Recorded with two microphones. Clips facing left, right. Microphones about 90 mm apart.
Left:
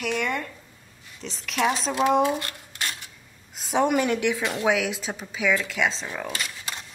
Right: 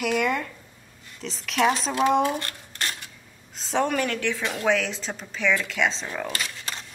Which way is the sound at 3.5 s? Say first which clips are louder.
Left 2 dB; 10° left (ahead or behind).